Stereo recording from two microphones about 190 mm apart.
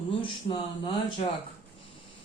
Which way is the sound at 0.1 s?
25° left (ahead or behind).